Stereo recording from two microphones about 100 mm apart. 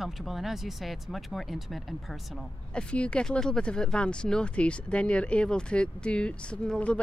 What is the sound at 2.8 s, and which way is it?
Speech, 10° left (ahead or behind).